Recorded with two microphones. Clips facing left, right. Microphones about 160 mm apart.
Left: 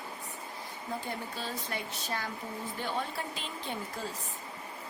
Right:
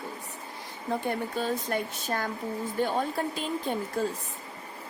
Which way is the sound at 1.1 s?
50° right (ahead or behind).